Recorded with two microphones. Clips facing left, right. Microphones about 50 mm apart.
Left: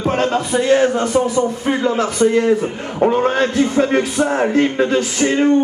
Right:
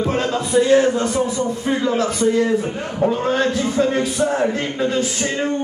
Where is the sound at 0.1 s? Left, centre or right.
Left.